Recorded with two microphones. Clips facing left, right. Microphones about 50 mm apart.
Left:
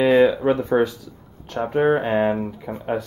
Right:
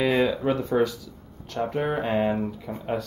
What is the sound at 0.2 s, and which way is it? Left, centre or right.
Speech, left.